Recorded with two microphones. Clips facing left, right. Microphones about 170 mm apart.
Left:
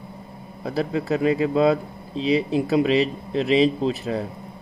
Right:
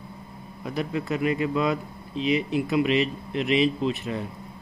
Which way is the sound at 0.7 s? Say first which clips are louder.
Left 4 dB; 35° left (ahead or behind).